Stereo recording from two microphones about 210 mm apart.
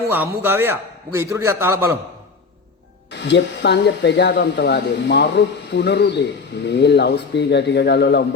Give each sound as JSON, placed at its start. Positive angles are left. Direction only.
{"t": 0.1, "sound": "a man's voice", "side_deg": -10}
{"t": 3.1, "sound": "speech", "side_deg": 60}